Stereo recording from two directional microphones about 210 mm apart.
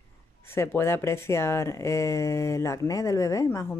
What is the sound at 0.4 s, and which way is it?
Speech, 10° left (ahead or behind).